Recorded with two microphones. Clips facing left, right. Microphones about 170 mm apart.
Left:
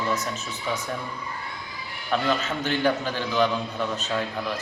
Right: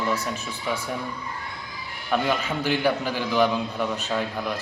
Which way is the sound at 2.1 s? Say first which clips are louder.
Right 1 dB; 10° right (ahead or behind).